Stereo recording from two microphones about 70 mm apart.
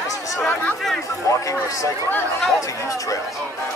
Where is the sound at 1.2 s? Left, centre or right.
Left.